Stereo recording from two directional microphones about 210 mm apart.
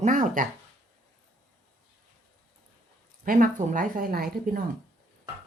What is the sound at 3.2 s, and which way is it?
Speech, 40° right (ahead or behind).